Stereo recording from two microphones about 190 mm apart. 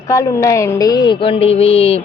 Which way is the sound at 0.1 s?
15° left (ahead or behind).